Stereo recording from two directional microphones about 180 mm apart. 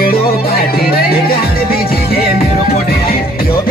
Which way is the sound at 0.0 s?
55° left (ahead or behind).